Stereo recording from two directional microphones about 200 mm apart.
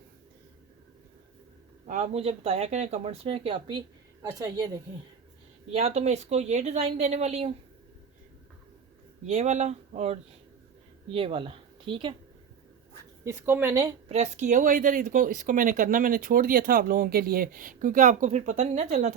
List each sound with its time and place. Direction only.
1.9 s speech: 35° right (ahead or behind)
5.7 s speech: 35° right (ahead or behind)
9.2 s speech: 35° right (ahead or behind)
13.2 s speech: 10° right (ahead or behind)
14.1 s speech: 35° right (ahead or behind)